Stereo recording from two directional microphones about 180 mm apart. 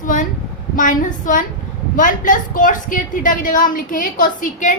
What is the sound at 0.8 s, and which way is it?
A woman's voice, 45° left (ahead or behind).